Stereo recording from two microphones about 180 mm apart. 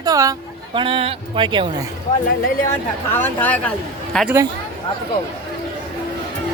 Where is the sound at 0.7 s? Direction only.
30° right (ahead or behind).